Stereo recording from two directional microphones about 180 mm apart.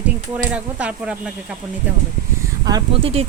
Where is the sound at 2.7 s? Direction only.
25° right (ahead or behind).